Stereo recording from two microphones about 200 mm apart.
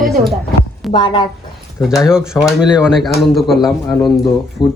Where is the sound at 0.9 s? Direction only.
25° left (ahead or behind).